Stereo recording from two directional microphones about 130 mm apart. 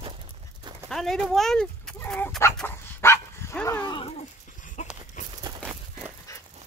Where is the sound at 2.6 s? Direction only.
20° left (ahead or behind).